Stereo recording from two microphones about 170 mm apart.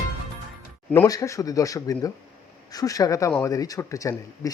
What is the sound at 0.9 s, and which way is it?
Speech, 20° left (ahead or behind).